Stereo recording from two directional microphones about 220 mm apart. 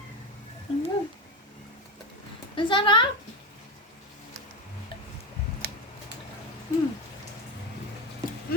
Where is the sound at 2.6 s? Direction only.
20° left (ahead or behind).